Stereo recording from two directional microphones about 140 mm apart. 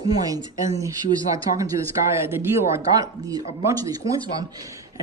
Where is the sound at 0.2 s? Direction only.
25° right (ahead or behind).